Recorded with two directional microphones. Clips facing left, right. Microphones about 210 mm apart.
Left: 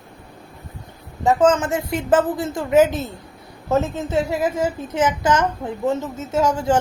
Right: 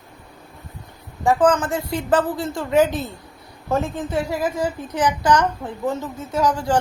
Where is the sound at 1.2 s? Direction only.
20° left (ahead or behind).